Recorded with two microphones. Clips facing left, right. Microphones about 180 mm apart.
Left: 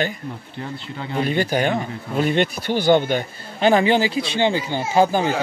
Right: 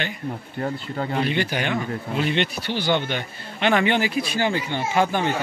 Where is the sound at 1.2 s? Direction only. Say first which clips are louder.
Left 8 dB; 40° left (ahead or behind).